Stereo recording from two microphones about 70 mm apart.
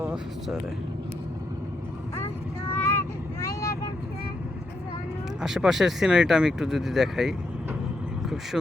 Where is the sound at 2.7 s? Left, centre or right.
Left.